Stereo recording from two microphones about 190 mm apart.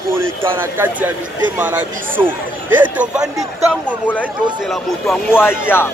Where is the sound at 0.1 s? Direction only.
15° right (ahead or behind).